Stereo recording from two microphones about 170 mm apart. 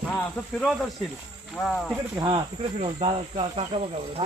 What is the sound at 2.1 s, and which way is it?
Speech, 30° right (ahead or behind).